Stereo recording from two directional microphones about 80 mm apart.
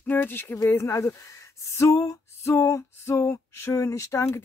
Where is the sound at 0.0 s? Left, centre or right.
Left.